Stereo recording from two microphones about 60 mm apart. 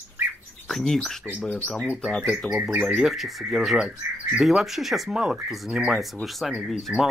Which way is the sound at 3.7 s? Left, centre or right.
Right.